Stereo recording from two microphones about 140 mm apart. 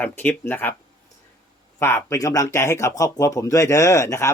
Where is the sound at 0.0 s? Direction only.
15° left (ahead or behind).